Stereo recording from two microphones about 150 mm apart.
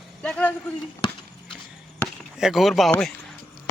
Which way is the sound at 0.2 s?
10° left (ahead or behind).